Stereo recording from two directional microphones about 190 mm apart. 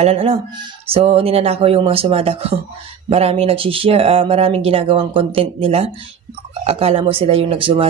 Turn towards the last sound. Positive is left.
turn(degrees=-25)  # may be behind; listen again after turning